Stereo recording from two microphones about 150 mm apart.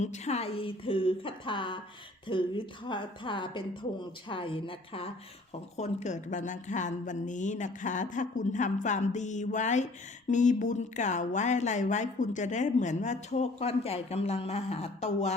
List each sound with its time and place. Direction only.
0.0 s a woman's voice: 50° left (ahead or behind)
5.7 s a woman's voice: 50° left (ahead or behind)